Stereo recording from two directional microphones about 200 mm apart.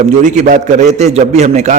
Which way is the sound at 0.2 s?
35° right (ahead or behind).